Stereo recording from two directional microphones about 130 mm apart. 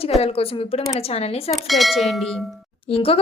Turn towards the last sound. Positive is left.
turn(degrees=45)  # may be behind; listen again after turning